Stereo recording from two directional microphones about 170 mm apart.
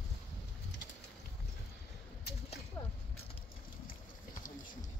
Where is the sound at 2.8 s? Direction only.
20° left (ahead or behind).